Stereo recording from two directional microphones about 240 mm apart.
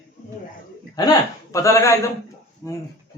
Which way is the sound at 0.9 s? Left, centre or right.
Centre.